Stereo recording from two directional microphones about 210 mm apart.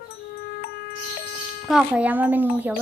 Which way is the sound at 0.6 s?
45° left (ahead or behind).